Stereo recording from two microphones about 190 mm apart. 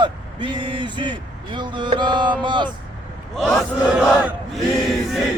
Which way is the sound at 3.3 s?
Centre (ahead or behind).